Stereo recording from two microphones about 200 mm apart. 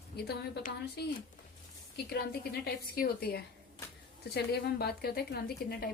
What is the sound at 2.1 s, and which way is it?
A woman's voice, 50° left (ahead or behind).